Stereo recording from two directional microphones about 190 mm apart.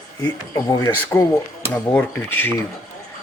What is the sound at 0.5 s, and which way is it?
Speech, 20° left (ahead or behind).